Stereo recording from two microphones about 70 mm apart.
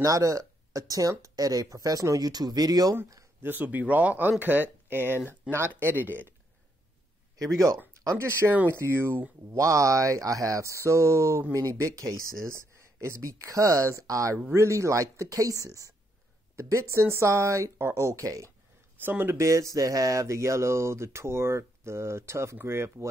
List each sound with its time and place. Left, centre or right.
0.0 s speech: right
3.4 s speech: right
5.0 s speech: left
5.7 s speech: right
7.9 s a sound: right
8.2 s a sound: right
9.6 s speech: right
12.4 s speech: right
18.9 s speech: right
19.3 s a sound: right